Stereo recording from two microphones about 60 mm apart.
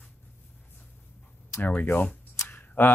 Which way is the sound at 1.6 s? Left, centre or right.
Left.